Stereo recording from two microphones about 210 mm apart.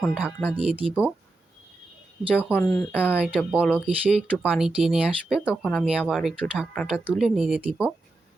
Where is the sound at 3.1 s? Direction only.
5° right (ahead or behind).